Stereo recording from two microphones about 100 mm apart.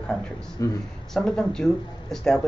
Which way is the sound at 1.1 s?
5° left (ahead or behind).